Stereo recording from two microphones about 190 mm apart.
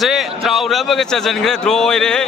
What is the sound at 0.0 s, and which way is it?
A man's voice, centre (ahead or behind).